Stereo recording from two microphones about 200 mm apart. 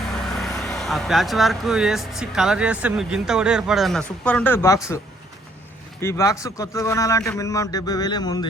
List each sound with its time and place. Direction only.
0.3 s speech: centre (ahead or behind)
6.0 s a man's voice: 15° left (ahead or behind)